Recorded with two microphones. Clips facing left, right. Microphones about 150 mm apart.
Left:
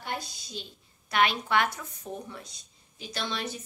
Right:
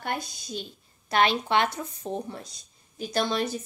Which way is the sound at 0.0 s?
50° right (ahead or behind).